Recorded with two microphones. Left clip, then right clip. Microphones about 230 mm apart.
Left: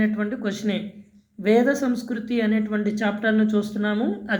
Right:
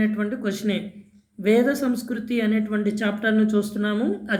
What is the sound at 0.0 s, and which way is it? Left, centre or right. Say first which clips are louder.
Speech: even; centre.